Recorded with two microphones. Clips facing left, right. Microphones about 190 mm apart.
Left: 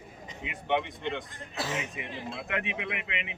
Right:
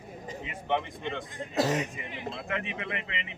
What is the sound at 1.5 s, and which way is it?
Speech, 35° right (ahead or behind).